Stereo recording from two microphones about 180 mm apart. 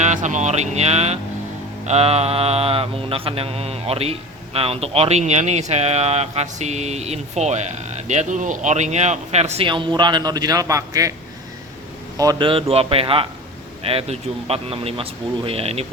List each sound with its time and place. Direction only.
0.0 s mantra: 45° right (ahead or behind); by 11.1 s 20° right (ahead or behind)
12.1 s mantra: 20° right (ahead or behind)